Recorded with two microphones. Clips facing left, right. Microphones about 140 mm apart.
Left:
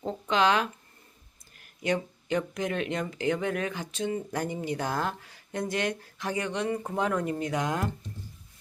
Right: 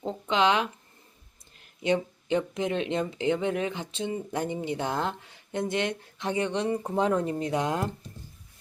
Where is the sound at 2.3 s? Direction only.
25° right (ahead or behind).